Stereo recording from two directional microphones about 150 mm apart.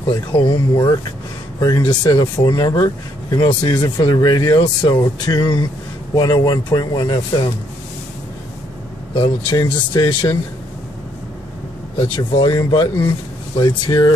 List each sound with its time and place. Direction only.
0.1 s speech: 30° left (ahead or behind)
9.1 s speech: 35° left (ahead or behind)
12.0 s speech: 30° left (ahead or behind)